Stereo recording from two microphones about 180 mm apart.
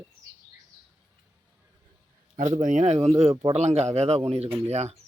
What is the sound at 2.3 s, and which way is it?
Speech, 45° right (ahead or behind).